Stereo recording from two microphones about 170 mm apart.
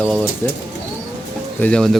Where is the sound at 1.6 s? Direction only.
5° left (ahead or behind).